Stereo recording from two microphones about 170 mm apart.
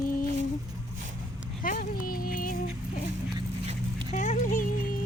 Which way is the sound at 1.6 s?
55° left (ahead or behind).